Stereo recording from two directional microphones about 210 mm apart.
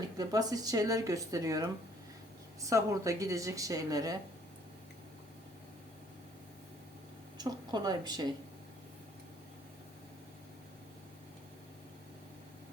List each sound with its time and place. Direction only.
0.2 s speech: 20° right (ahead or behind)
7.3 s speech: 20° right (ahead or behind)